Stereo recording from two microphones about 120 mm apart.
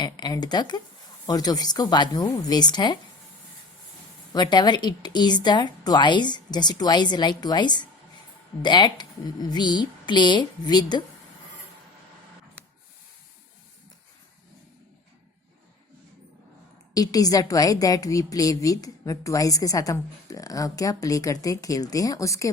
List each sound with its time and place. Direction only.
0.0 s a woman's voice: 35° left (ahead or behind)
4.3 s a woman's voice: 35° left (ahead or behind)
16.9 s a woman's voice: 30° left (ahead or behind)